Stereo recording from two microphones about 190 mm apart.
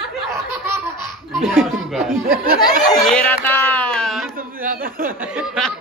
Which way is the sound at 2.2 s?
50° right (ahead or behind).